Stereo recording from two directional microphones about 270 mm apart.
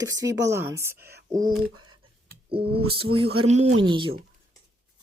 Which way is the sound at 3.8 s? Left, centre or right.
Centre.